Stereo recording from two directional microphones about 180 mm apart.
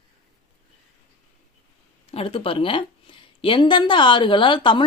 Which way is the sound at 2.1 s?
30° left (ahead or behind).